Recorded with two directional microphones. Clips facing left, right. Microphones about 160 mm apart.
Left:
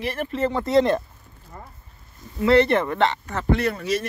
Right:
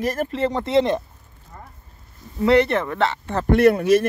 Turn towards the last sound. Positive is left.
turn(degrees=-55)  # may be behind; listen again after turning